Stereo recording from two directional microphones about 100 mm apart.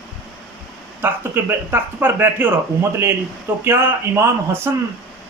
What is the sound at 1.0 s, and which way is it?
A man's voice, 20° right (ahead or behind).